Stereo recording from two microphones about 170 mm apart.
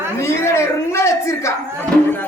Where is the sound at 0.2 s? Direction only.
15° left (ahead or behind).